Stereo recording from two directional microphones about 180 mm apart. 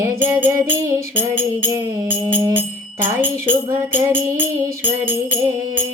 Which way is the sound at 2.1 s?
30° right (ahead or behind).